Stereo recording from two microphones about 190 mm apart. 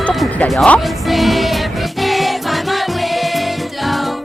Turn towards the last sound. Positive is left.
turn(degrees=0)  # may be behind; listen again after turning